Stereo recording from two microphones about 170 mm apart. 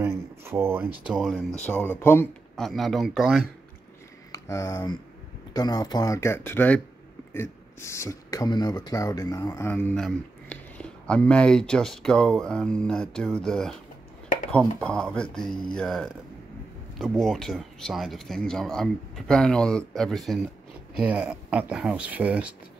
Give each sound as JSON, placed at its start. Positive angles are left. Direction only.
{"t": 0.0, "sound": "speech", "side_deg": -15}
{"t": 1.7, "sound": "speech", "side_deg": 10}
{"t": 2.5, "sound": "speech", "side_deg": 0}
{"t": 4.3, "sound": "speech", "side_deg": 20}
{"t": 14.8, "sound": "speech", "side_deg": 5}